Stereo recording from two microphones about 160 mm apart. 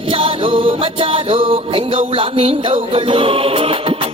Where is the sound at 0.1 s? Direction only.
35° right (ahead or behind).